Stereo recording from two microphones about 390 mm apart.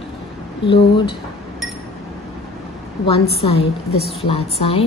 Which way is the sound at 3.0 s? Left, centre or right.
Centre.